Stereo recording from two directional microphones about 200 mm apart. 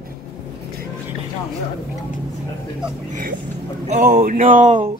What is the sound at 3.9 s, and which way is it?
Speech, 35° right (ahead or behind).